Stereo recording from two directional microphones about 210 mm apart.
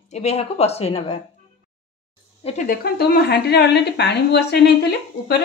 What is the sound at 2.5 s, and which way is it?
Speech, 40° left (ahead or behind).